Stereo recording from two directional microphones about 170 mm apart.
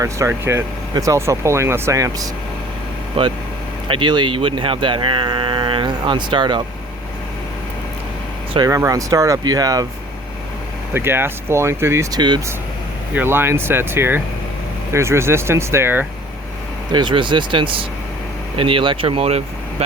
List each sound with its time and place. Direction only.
0.0 s speech: 15° right (ahead or behind)
3.2 s speech: 30° right (ahead or behind)
8.5 s speech: 20° right (ahead or behind)
10.9 s speech: 15° right (ahead or behind)
13.1 s speech: 15° right (ahead or behind)
16.9 s speech: 25° right (ahead or behind)